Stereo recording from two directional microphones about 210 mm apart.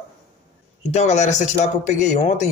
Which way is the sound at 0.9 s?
35° left (ahead or behind).